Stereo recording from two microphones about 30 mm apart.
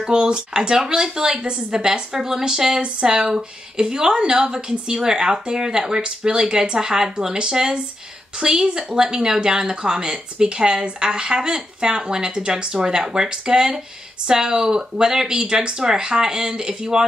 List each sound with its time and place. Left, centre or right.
0.0 s a woman's voice: right